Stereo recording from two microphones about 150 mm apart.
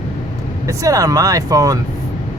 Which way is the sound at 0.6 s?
20° right (ahead or behind).